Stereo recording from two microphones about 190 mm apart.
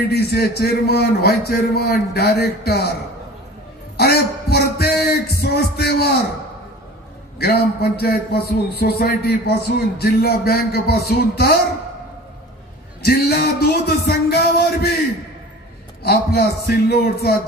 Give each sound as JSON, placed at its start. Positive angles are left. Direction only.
{"t": 0.1, "sound": "a man's voice", "side_deg": 55}
{"t": 3.9, "sound": "a sound", "side_deg": 60}
{"t": 7.3, "sound": "a man's voice", "side_deg": 55}
{"t": 13.0, "sound": "a man's voice", "side_deg": 55}
{"t": 16.0, "sound": "a man's voice", "side_deg": 55}